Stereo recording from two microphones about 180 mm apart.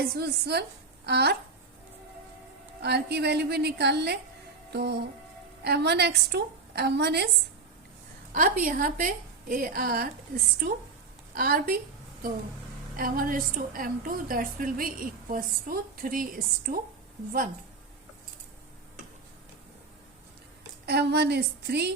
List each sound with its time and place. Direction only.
0.0 s a woman's voice: 60° right (ahead or behind)
2.8 s a woman's voice: 65° right (ahead or behind)
4.7 s music: 65° right (ahead or behind)
5.6 s a woman's voice: 65° right (ahead or behind)
8.3 s a woman's voice: 50° right (ahead or behind)
13.0 s a woman's voice: 55° right (ahead or behind)
20.8 s a woman's voice: 65° right (ahead or behind)